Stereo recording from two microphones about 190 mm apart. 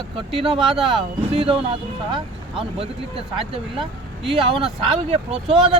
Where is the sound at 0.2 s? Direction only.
30° right (ahead or behind).